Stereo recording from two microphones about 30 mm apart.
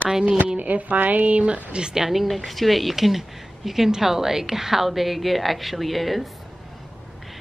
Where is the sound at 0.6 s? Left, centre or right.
Right.